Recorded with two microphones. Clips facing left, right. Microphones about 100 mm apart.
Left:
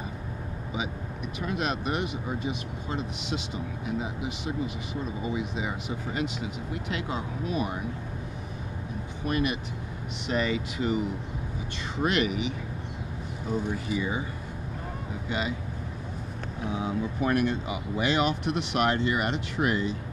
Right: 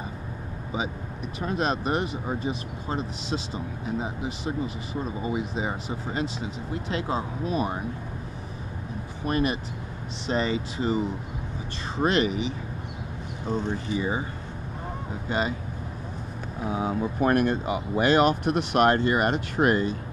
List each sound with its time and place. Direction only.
1.4 s speech: 35° right (ahead or behind)
9.2 s speech: 35° right (ahead or behind)
15.2 s speech: 40° right (ahead or behind)
16.6 s speech: 45° right (ahead or behind)